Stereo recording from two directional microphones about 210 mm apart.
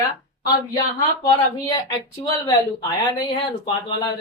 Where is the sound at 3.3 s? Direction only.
20° left (ahead or behind).